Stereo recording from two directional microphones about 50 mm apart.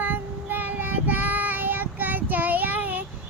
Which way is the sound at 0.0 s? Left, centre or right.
Right.